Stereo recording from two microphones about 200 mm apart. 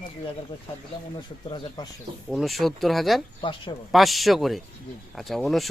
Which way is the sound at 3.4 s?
25° left (ahead or behind).